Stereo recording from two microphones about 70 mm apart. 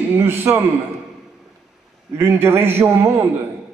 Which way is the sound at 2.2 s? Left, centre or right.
Right.